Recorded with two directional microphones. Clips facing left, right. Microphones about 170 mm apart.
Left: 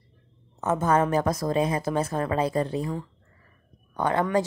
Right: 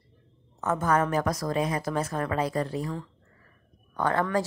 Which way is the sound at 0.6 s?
20° left (ahead or behind).